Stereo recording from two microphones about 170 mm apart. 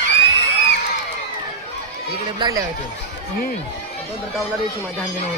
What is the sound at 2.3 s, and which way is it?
Speech, 25° right (ahead or behind).